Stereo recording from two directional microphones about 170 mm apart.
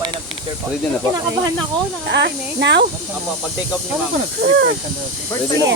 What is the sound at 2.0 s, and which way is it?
Speech, 90° right.